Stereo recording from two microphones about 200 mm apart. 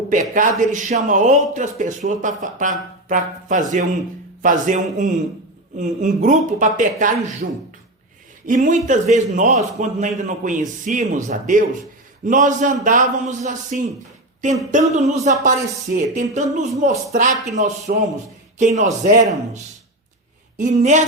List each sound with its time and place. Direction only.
0.1 s a man's voice: 40° right (ahead or behind)
20.6 s a man's voice: 35° right (ahead or behind)